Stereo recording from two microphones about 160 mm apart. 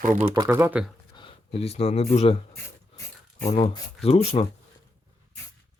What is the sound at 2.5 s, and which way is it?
Writing, 15° left (ahead or behind).